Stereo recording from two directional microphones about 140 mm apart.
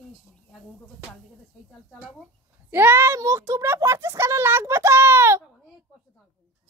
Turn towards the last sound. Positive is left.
turn(degrees=-15)  # may be behind; listen again after turning